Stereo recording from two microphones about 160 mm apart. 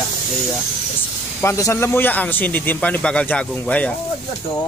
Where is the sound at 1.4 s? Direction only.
20° left (ahead or behind).